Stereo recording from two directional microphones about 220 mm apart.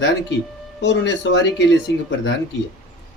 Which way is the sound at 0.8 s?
55° left (ahead or behind).